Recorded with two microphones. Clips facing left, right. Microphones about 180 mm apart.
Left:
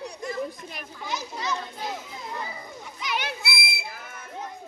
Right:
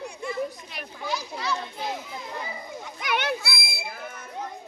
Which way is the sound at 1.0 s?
20° left (ahead or behind).